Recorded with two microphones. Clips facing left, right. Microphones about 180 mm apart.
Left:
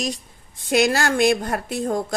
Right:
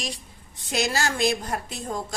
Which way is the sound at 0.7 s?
55° left (ahead or behind).